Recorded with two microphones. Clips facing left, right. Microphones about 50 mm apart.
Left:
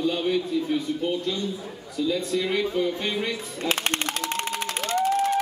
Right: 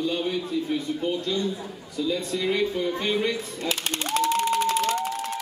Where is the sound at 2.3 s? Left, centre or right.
Centre.